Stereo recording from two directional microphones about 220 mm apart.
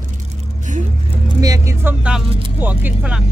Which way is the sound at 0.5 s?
35° right (ahead or behind).